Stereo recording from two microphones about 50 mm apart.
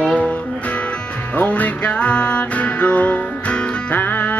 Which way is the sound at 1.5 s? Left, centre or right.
Left.